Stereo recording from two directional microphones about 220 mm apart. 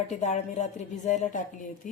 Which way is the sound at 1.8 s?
35° left (ahead or behind).